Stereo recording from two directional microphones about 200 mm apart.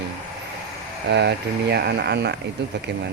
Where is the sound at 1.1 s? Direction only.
60° right (ahead or behind).